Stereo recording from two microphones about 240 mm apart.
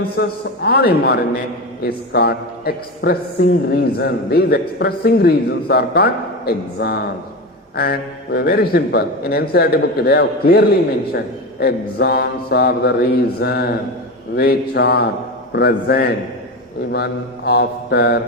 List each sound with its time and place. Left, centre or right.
0.2 s a man's voice: left